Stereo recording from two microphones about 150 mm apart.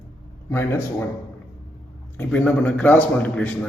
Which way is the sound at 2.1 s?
10° left (ahead or behind).